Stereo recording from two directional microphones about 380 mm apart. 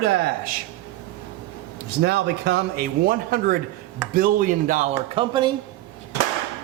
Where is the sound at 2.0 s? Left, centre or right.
Right.